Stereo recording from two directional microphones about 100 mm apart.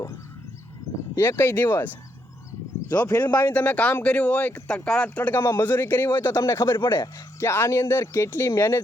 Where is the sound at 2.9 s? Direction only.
40° left (ahead or behind).